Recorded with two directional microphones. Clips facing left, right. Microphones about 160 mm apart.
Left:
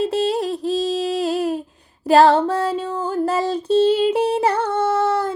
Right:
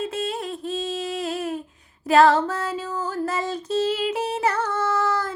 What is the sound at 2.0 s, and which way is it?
Female singing, 30° left (ahead or behind).